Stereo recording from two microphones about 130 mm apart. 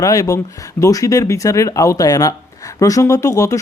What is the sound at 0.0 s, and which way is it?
Speech, 25° left (ahead or behind).